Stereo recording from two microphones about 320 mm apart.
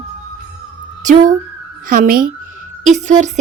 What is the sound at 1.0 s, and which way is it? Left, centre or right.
A woman's voice, right.